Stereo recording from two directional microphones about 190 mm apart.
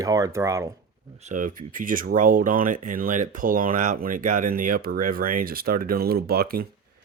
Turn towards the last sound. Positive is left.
turn(degrees=-55)  # may be behind; listen again after turning